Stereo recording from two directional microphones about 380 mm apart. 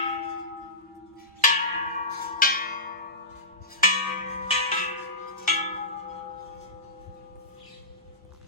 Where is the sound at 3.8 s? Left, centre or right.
Centre.